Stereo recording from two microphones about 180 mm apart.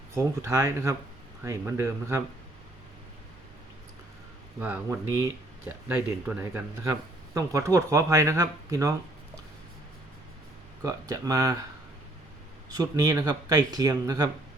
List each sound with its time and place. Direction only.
0.1 s speech: 15° right (ahead or behind)
4.6 s speech: 10° right (ahead or behind)
10.8 s speech: 20° right (ahead or behind)
12.7 s speech: 20° right (ahead or behind)